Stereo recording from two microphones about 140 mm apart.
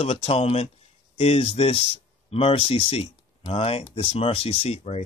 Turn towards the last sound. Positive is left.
turn(degrees=50)  # may be behind; listen again after turning